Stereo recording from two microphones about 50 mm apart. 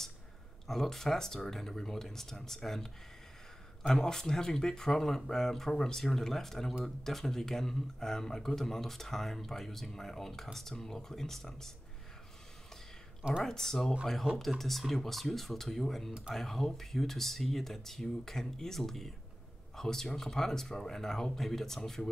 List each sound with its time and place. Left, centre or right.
0.7 s speech: centre
13.4 s speech: centre
16.1 s speech: right
16.3 s speech: centre